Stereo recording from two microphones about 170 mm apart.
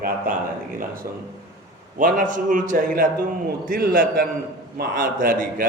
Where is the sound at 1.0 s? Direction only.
55° right (ahead or behind).